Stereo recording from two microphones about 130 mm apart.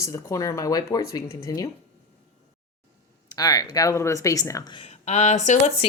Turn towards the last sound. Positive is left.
turn(degrees=60)  # may be behind; listen again after turning